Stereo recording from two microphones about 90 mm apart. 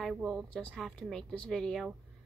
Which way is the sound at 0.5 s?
5° left (ahead or behind).